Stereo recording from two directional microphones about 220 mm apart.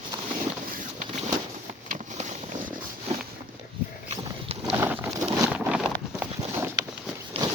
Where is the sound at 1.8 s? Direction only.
35° right (ahead or behind).